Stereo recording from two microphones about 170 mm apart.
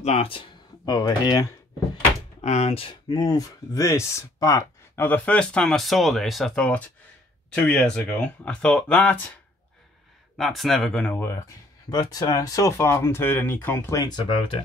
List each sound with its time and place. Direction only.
0.0 s speech: 40° left (ahead or behind); by 1.5 s 25° left (ahead or behind)
2.4 s speech: 40° left (ahead or behind); by 9.2 s 5° left (ahead or behind)
10.3 s speech: centre (ahead or behind); by 14.6 s 30° left (ahead or behind)